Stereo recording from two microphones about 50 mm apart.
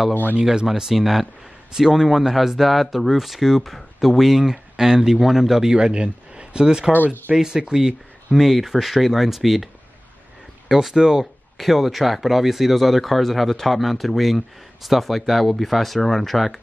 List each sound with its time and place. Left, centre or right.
0.1 s speech: left
0.4 s speech: centre
0.7 s speech: centre
10.7 s speech: centre
11.5 s speech: centre